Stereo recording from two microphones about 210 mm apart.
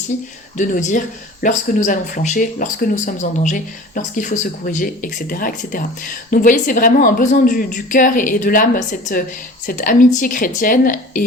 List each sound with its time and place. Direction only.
0.5 s speech: 35° left (ahead or behind)